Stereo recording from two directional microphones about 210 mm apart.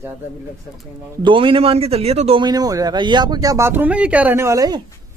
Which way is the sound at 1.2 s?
25° right (ahead or behind).